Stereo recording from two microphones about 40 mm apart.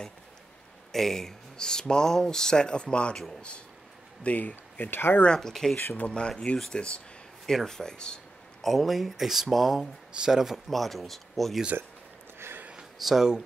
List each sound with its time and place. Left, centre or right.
0.9 s speech: centre; by 3.2 s left
3.2 s speech: centre
4.2 s speech: left
5.2 s speech: left
5.5 s speech: centre
5.9 s speech: left
7.4 s speech: centre
8.6 s speech: centre
10.1 s speech: centre
10.7 s speech: centre
11.7 s speech: right
13.0 s speech: centre